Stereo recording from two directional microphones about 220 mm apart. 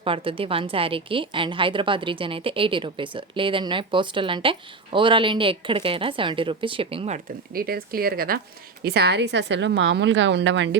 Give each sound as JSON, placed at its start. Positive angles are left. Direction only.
{"t": 0.0, "sound": "a woman's voice", "side_deg": -25}
{"t": 7.5, "sound": "a woman's voice", "side_deg": -45}